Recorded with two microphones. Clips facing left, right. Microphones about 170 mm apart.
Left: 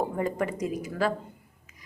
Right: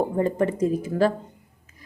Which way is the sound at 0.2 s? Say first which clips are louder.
Right 6 dB; 25° right (ahead or behind).